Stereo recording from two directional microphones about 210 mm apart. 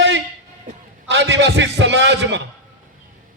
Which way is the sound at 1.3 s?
60° right (ahead or behind).